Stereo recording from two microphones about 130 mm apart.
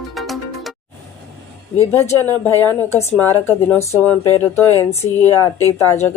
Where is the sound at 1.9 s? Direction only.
20° left (ahead or behind).